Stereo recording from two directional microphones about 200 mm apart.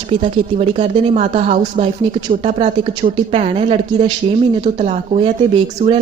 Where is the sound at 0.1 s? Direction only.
25° right (ahead or behind).